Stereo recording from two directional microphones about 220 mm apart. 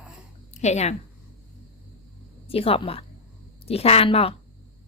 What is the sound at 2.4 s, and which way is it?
A woman's voice, 25° left (ahead or behind).